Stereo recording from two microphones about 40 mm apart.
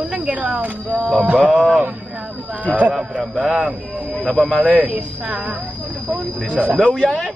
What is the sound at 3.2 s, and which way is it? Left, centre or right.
Speech, centre.